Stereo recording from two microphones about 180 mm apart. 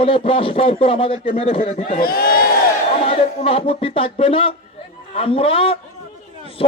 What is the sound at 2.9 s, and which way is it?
A man's voice, 35° left (ahead or behind).